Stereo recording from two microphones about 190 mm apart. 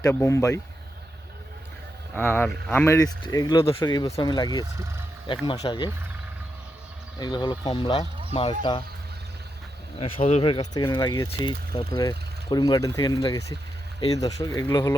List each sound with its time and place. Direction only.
0.0 s speech: 15° left (ahead or behind)
2.1 s speech: 10° left (ahead or behind); by 5.9 s 25° left (ahead or behind)
7.2 s speech: 25° left (ahead or behind)
10.0 s speech: 35° left (ahead or behind); by 14.9 s 15° left (ahead or behind)